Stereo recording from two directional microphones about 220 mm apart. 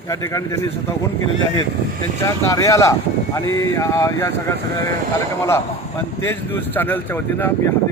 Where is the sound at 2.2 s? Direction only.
15° left (ahead or behind).